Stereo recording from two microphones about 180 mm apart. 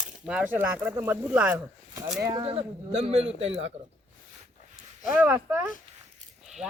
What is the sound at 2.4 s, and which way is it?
Speech, 35° right (ahead or behind).